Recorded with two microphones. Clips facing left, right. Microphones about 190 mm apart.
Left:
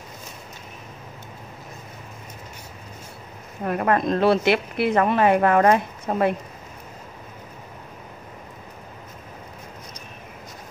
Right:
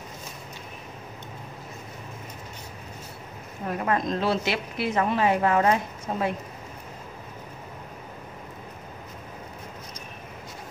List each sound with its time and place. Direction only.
3.6 s a woman's voice: 60° left (ahead or behind)